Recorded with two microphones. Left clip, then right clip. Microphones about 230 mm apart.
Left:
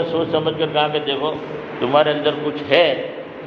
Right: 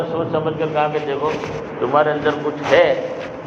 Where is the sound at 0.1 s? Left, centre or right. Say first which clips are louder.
Left 1 dB; left.